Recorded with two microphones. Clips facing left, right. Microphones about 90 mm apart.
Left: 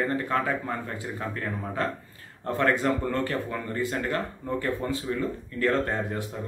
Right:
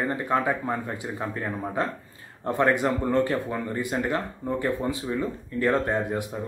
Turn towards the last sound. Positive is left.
turn(degrees=-15)  # may be behind; listen again after turning